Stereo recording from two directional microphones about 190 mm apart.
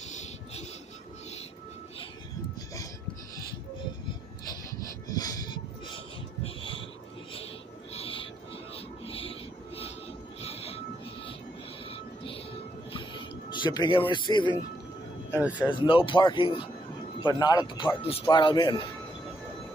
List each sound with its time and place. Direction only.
0.1 s music: 35° left (ahead or behind)
5.1 s music: 20° left (ahead or behind)
6.4 s a sound: 30° left (ahead or behind)
7.9 s owl: 30° left (ahead or behind)
8.7 s music: 30° left (ahead or behind)
10.4 s vehicle: 30° left (ahead or behind)
12.9 s music: 25° left (ahead or behind)
15.3 s speech: 5° right (ahead or behind)
15.8 s a man's voice: 25° left (ahead or behind)